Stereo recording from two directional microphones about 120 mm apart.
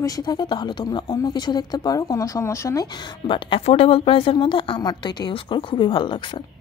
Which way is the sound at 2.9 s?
40° left (ahead or behind).